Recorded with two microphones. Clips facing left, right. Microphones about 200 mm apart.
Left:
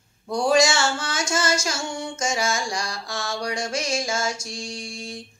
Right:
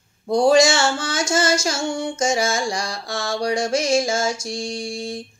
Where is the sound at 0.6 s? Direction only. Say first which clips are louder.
Right 3 dB; 30° right (ahead or behind).